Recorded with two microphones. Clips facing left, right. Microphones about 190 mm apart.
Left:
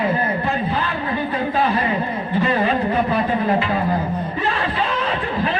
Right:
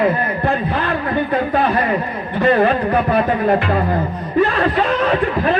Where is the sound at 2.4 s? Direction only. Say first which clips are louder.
Right 6 dB; 55° right (ahead or behind).